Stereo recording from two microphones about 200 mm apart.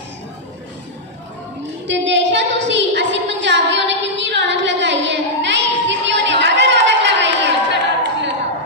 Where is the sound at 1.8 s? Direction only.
65° right (ahead or behind).